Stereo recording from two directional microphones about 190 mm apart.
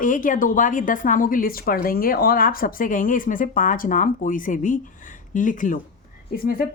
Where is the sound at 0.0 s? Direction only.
45° left (ahead or behind).